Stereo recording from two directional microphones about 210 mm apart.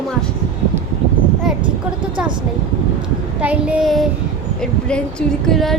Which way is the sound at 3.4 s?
5° right (ahead or behind).